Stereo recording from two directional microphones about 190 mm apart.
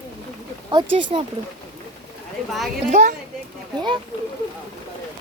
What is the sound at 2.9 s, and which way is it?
Speech, 40° right (ahead or behind).